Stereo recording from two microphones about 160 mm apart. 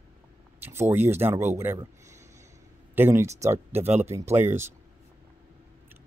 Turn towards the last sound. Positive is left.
turn(degrees=-15)  # may be behind; listen again after turning